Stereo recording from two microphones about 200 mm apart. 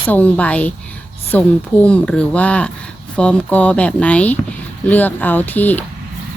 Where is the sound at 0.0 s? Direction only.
10° left (ahead or behind).